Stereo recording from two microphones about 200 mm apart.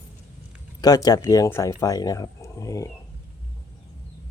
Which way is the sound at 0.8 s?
20° left (ahead or behind).